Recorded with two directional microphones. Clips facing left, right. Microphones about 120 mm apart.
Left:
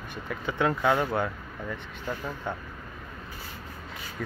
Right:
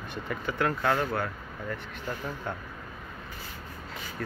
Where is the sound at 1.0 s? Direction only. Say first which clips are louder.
Left 2 dB; 20° left (ahead or behind).